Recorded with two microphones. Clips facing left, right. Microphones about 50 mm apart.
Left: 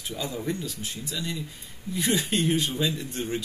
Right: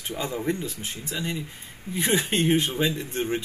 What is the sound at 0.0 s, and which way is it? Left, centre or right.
Speech, right.